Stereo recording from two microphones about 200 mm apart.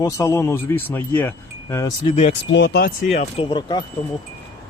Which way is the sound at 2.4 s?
65° left (ahead or behind).